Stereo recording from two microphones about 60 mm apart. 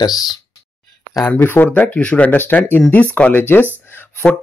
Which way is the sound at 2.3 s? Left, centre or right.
Left.